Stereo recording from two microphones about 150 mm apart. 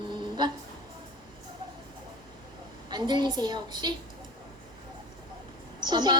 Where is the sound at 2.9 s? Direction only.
30° right (ahead or behind).